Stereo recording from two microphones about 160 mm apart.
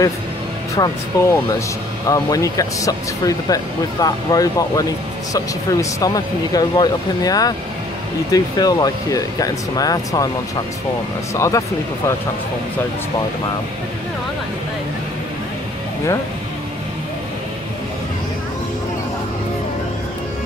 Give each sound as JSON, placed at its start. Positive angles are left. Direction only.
{"t": 0.7, "sound": "speech", "side_deg": 20}
{"t": 11.3, "sound": "speech", "side_deg": 20}